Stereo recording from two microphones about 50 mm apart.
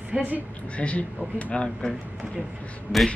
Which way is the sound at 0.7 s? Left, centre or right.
Left.